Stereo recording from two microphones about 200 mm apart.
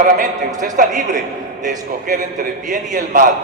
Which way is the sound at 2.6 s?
40° right (ahead or behind).